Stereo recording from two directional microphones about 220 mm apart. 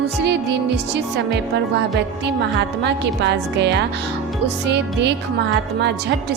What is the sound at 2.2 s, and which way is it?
Speech, 50° right (ahead or behind).